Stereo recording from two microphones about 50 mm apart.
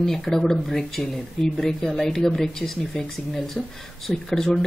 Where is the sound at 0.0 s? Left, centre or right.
Centre.